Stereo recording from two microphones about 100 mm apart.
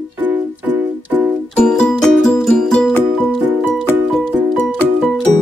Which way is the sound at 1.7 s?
5° left (ahead or behind).